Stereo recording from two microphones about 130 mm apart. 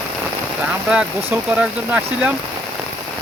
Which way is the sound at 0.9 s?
10° right (ahead or behind).